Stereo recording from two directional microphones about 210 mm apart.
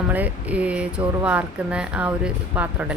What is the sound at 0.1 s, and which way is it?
Speech, 5° right (ahead or behind).